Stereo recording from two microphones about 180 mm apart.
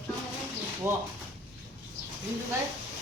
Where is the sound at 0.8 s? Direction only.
10° right (ahead or behind).